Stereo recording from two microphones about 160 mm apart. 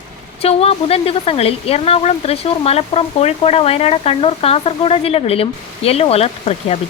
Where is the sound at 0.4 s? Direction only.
40° left (ahead or behind).